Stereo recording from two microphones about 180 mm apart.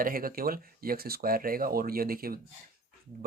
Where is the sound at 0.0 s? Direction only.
50° right (ahead or behind).